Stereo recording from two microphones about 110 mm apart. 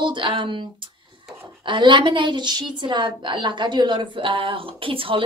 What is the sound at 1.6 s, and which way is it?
A woman's voice, 45° right (ahead or behind).